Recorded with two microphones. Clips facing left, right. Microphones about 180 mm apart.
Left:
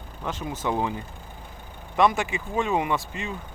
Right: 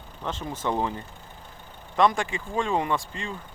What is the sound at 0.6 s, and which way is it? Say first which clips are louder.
Speech: even; 5° left (ahead or behind).